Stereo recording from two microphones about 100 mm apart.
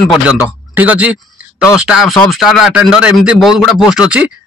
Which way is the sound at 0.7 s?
15° right (ahead or behind).